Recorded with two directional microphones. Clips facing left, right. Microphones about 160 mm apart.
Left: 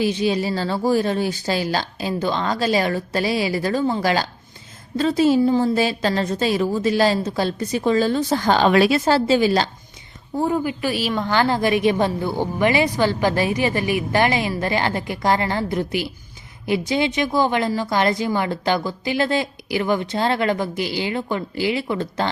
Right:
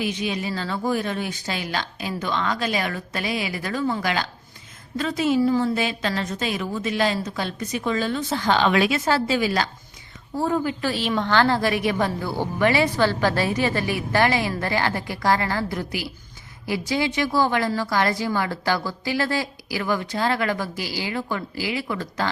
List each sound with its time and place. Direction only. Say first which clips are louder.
0.0 s a woman's voice: left 6 dB; 30° left (ahead or behind)
10.3 s a woman's voice: left 2 dB; 15° left (ahead or behind)